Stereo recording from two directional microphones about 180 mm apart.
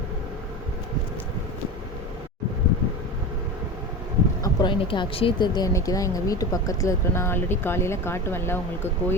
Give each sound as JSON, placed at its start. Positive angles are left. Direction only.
{"t": 4.4, "sound": "speech", "side_deg": 25}